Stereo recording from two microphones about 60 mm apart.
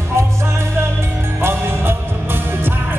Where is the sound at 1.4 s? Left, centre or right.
Right.